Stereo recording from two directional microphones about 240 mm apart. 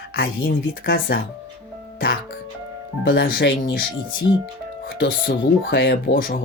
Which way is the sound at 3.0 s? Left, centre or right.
Left.